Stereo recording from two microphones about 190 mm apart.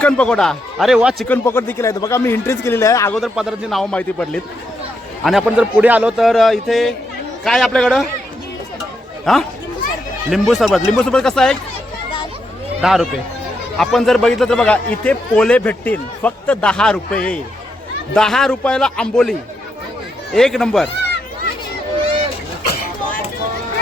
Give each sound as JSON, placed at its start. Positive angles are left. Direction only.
{"t": 0.0, "sound": "speech", "side_deg": 5}
{"t": 1.3, "sound": "speech", "side_deg": 10}
{"t": 3.2, "sound": "speech", "side_deg": 0}
{"t": 9.2, "sound": "speech", "side_deg": 0}
{"t": 12.8, "sound": "speech", "side_deg": 0}